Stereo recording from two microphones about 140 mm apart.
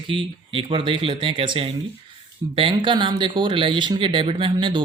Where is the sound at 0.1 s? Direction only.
40° right (ahead or behind).